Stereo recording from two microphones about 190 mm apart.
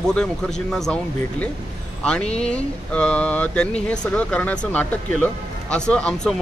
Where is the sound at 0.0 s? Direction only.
5° left (ahead or behind).